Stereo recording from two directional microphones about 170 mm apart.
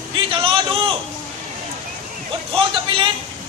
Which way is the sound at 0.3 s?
30° right (ahead or behind).